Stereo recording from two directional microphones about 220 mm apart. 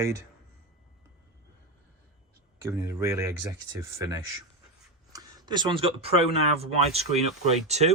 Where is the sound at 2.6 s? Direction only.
15° right (ahead or behind).